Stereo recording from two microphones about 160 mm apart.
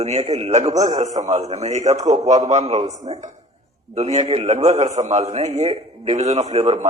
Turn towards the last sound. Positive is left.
turn(degrees=-45)  # may be behind; listen again after turning